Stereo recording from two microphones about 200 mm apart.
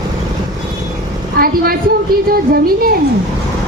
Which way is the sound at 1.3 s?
50° right (ahead or behind).